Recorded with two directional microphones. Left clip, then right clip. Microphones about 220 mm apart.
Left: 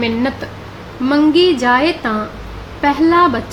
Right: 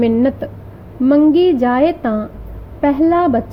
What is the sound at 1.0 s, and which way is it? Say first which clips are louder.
A woman's voice: right 1 dB; 30° right (ahead or behind).